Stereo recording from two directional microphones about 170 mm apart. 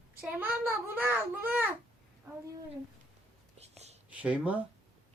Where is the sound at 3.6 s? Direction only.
40° right (ahead or behind).